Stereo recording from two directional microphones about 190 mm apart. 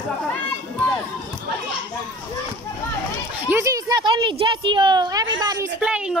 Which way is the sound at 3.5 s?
15° right (ahead or behind).